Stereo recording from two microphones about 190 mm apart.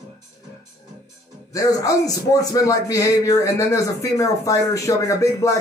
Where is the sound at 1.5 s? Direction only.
20° left (ahead or behind).